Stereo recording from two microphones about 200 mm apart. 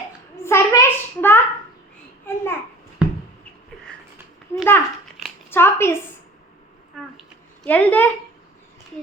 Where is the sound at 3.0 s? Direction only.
5° right (ahead or behind).